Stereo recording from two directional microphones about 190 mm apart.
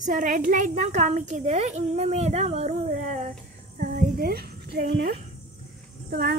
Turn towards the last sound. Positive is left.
turn(degrees=-55)  # may be behind; listen again after turning